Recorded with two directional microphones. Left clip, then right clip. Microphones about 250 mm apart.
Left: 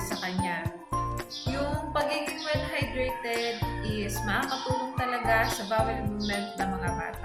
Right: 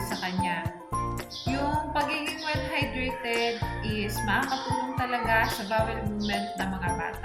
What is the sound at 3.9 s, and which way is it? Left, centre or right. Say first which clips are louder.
Speech: right 3 dB; centre.